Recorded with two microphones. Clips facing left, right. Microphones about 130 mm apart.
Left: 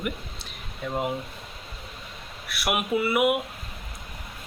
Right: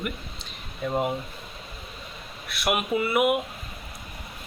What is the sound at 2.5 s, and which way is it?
Speech, 10° left (ahead or behind).